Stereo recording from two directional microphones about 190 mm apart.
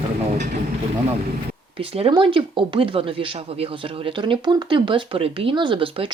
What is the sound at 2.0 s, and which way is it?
Speech, 25° right (ahead or behind).